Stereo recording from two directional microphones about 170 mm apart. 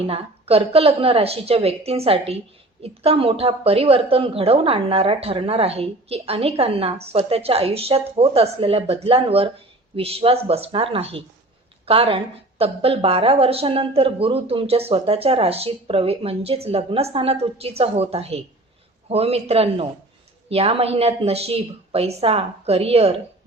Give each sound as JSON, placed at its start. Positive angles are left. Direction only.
{"t": 0.1, "sound": "a woman's voice", "side_deg": -35}